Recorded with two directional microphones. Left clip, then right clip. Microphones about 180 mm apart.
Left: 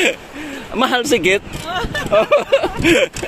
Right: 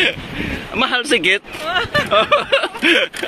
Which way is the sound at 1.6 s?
25° right (ahead or behind).